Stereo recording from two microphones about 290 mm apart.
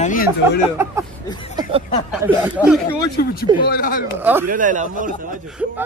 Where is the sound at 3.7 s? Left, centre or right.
Left.